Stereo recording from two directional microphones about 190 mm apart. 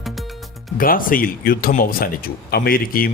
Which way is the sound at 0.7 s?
50° left (ahead or behind).